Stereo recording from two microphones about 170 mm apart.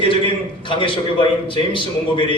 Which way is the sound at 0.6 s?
30° left (ahead or behind).